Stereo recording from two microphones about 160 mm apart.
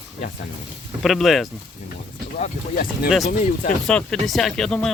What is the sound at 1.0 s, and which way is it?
Speech, centre (ahead or behind).